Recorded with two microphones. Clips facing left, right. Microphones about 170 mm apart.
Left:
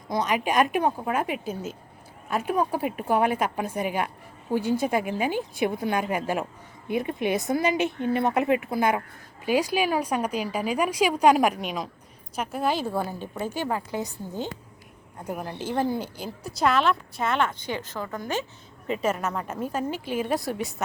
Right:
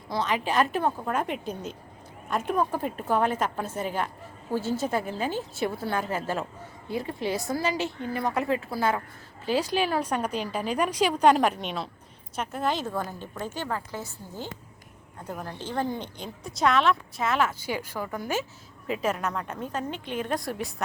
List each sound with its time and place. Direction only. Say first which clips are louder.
0.1 s a woman's voice: left 2 dB; 15° left (ahead or behind); by 18.4 s 10° right (ahead or behind)
18.9 s a woman's voice: left 2 dB; centre (ahead or behind)